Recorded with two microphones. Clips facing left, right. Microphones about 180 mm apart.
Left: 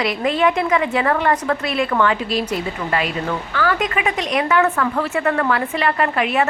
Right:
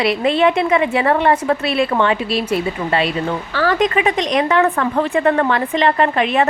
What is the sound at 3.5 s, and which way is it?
A woman's voice, 35° right (ahead or behind).